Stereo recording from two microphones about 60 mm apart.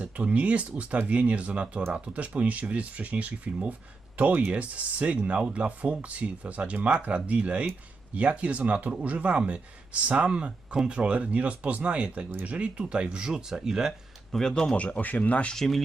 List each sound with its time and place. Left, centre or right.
0.0 s speech: right
14.3 s speech: centre
14.8 s speech: left
15.5 s speech: centre